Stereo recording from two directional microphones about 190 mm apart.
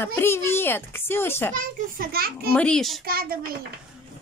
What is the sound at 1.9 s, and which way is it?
Speech, 50° right (ahead or behind).